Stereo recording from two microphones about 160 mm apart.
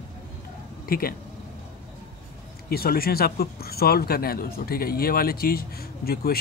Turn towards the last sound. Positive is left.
turn(degrees=70)  # may be behind; listen again after turning